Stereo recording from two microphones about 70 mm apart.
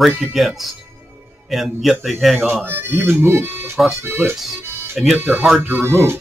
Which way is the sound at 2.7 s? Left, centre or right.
Right.